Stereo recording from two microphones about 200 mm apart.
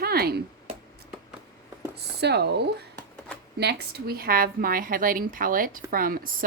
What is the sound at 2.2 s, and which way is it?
Speech, 55° right (ahead or behind).